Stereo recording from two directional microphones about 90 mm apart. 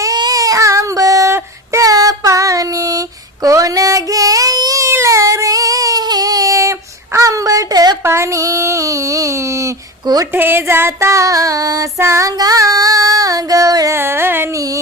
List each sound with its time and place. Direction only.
0.0 s child singing: 45° right (ahead or behind)
8.0 s child singing: 30° right (ahead or behind)
10.0 s speech: 45° right (ahead or behind)
10.3 s child singing: 25° right (ahead or behind)
12.3 s female singing: 45° right (ahead or behind)
13.9 s music: 25° right (ahead or behind)
14.5 s a sound: 40° right (ahead or behind)